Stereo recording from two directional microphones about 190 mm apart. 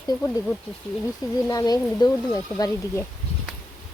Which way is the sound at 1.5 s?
20° left (ahead or behind).